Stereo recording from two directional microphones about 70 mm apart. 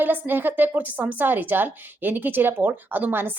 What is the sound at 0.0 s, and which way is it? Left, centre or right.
A woman's voice, right.